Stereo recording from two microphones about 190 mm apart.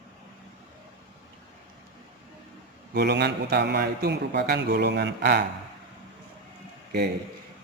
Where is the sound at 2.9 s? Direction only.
60° right (ahead or behind).